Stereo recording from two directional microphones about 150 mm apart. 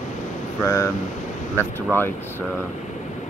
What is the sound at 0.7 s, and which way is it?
Speech, 20° left (ahead or behind).